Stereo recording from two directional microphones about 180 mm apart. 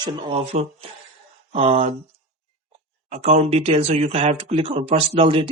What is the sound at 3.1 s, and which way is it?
Speech, 40° right (ahead or behind).